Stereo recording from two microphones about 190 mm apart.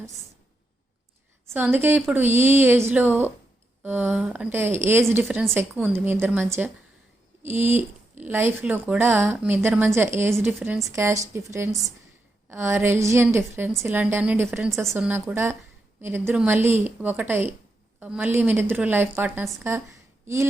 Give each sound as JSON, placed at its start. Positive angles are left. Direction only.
{"t": 1.5, "sound": "a woman's voice", "side_deg": -10}